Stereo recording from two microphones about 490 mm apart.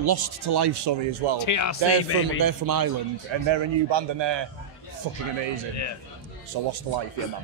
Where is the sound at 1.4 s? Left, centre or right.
Left.